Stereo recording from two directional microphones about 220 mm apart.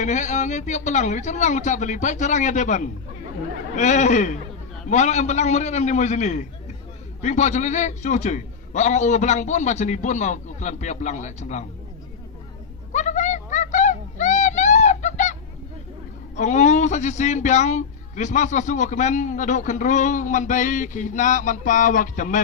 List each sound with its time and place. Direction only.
0.0 s a man's voice: 35° left (ahead or behind)
12.9 s a sound: 35° left (ahead or behind)
16.3 s a man's voice: 30° left (ahead or behind)